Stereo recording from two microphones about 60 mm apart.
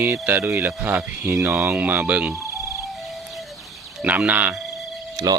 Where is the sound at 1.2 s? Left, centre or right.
Right.